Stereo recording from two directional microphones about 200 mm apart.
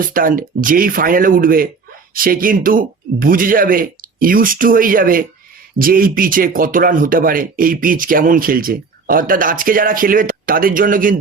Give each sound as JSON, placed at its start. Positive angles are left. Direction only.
{"t": 0.0, "sound": "speech", "side_deg": -45}